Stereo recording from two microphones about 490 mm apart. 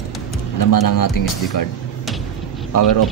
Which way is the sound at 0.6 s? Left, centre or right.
Left.